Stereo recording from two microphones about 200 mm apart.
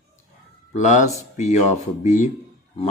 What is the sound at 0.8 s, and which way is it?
Speech, 35° left (ahead or behind).